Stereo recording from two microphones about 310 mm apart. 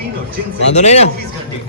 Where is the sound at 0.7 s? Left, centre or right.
Left.